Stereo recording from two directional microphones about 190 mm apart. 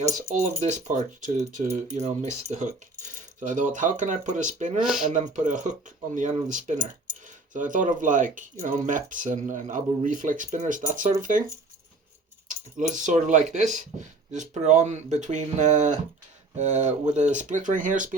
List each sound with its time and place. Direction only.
0.2 s speech: 40° right (ahead or behind)
4.8 s speech: 5° right (ahead or behind)
5.0 s speech: 40° right (ahead or behind)
12.5 s speech: 40° right (ahead or behind)